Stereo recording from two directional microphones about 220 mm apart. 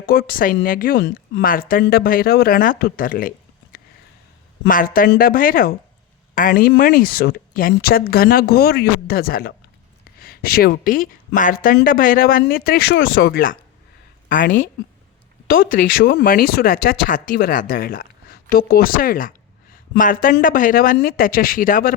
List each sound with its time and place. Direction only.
0.0 s speech: 40° left (ahead or behind)
14.4 s a woman's voice: 60° left (ahead or behind)
15.4 s speech: 40° left (ahead or behind)